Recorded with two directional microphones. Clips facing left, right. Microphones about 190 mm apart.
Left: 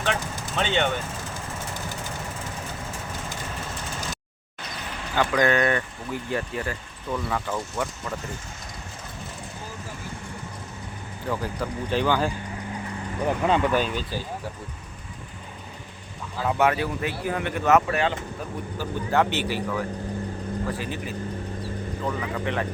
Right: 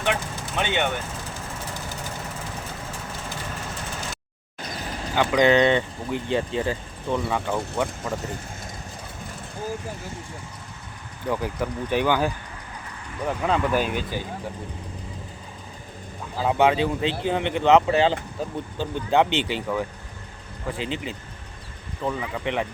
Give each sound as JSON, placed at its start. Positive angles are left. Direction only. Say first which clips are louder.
{"t": 0.0, "sound": "vehicle", "louder": "right 1 dB", "side_deg": -15}
{"t": 5.1, "sound": "speech", "louder": "right 3 dB", "side_deg": -15}
{"t": 11.3, "sound": "speech", "louder": "right 2 dB", "side_deg": -15}
{"t": 13.2, "sound": "speech", "louder": "left 1 dB", "side_deg": 0}
{"t": 16.4, "sound": "speech", "louder": "right 3 dB", "side_deg": -20}